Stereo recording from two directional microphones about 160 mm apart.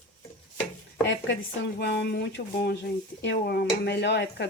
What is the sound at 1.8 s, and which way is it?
Speech, 90° left.